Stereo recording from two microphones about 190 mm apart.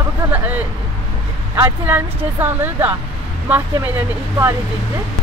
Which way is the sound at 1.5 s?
15° right (ahead or behind).